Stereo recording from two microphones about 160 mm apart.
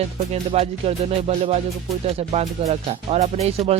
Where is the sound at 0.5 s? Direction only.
40° right (ahead or behind).